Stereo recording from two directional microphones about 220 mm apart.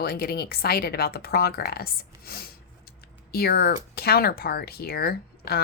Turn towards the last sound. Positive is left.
turn(degrees=45)  # may be behind; listen again after turning